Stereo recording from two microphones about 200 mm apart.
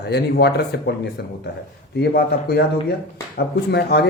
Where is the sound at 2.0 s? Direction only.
55° left (ahead or behind).